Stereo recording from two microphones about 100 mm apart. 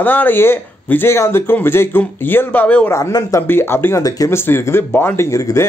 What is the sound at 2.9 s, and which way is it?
Speech, 30° left (ahead or behind).